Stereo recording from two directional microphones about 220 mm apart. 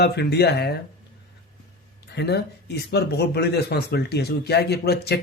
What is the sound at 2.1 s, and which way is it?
Speech, 50° left (ahead or behind).